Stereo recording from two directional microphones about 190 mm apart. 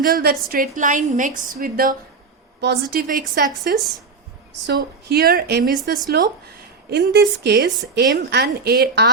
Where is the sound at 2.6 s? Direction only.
55° right (ahead or behind).